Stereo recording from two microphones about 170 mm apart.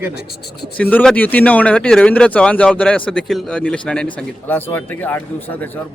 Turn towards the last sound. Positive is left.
turn(degrees=10)  # may be behind; listen again after turning